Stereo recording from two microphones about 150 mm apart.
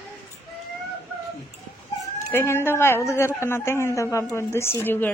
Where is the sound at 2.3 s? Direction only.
15° left (ahead or behind).